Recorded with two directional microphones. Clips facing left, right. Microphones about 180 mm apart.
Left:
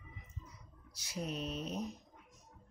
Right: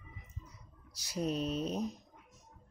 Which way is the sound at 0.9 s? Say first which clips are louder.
Right 6 dB; 35° right (ahead or behind).